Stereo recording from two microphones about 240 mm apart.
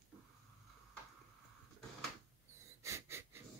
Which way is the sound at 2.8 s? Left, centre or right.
Centre.